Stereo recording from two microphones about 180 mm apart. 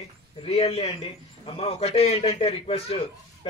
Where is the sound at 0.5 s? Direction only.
35° left (ahead or behind).